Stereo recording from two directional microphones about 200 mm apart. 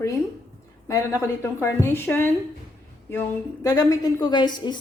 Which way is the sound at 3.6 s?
20° left (ahead or behind).